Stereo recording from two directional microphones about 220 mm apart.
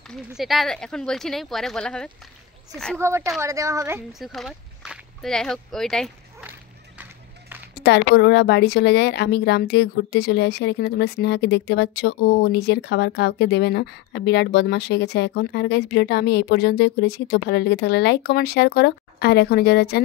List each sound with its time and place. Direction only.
0.1 s speech: centre (ahead or behind)
3.0 s a woman's voice: 10° right (ahead or behind)
4.1 s speech: centre (ahead or behind)
7.0 s run: 10° right (ahead or behind)
7.7 s speech: 50° left (ahead or behind)